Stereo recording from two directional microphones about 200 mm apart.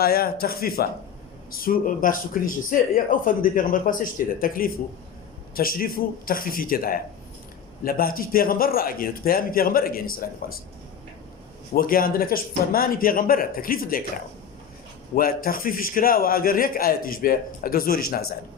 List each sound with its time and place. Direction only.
0.0 s speech: 50° left (ahead or behind)
11.7 s speech: 45° left (ahead or behind)
15.1 s speech: 45° left (ahead or behind)